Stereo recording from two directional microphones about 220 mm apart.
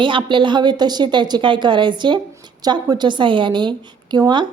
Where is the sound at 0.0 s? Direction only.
20° right (ahead or behind).